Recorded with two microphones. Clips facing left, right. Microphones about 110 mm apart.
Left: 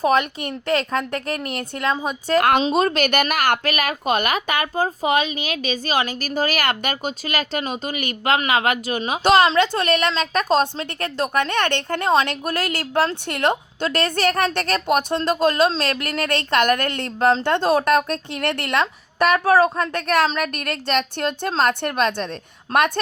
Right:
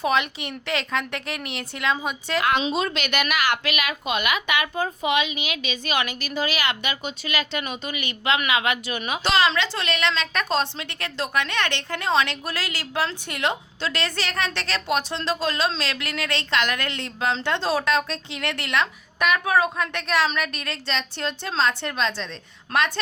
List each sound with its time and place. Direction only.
0.0 s a woman's voice: 45° left (ahead or behind)
22.7 s a woman's voice: 35° left (ahead or behind)